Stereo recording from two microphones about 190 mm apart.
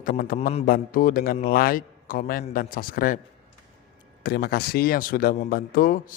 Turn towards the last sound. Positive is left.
turn(degrees=50)  # may be behind; listen again after turning